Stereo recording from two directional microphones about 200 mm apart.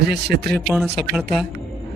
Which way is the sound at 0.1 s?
55° right (ahead or behind).